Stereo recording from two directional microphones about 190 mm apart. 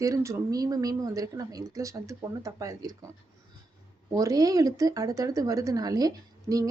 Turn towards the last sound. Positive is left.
turn(degrees=-20)  # may be behind; listen again after turning